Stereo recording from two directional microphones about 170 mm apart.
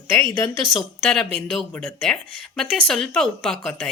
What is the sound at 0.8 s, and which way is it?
A woman's voice, 5° left (ahead or behind).